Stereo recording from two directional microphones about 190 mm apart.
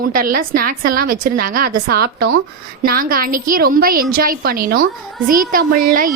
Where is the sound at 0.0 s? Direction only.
50° right (ahead or behind).